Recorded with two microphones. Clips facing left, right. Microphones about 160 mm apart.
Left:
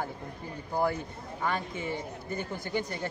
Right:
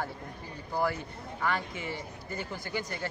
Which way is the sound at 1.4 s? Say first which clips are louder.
Left 1 dB; 20° left (ahead or behind).